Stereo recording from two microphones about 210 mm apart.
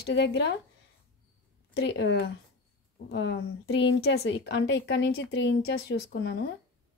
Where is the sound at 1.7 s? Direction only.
55° left (ahead or behind).